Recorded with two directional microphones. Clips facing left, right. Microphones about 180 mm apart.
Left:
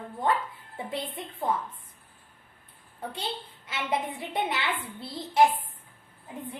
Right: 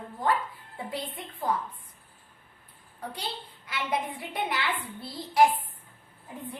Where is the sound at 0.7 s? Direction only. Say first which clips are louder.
Left 2 dB; 25° left (ahead or behind).